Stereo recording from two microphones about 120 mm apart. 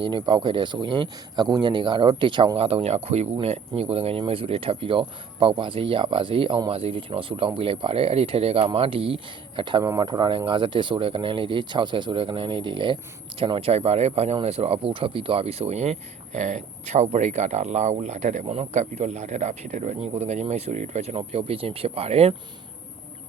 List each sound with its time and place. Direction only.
0.0 s speech: 40° right (ahead or behind)
9.8 s speech: 30° right (ahead or behind); by 22.4 s 55° right (ahead or behind)